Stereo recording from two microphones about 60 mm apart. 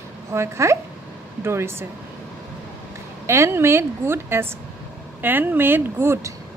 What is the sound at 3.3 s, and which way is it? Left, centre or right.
A woman's voice, right.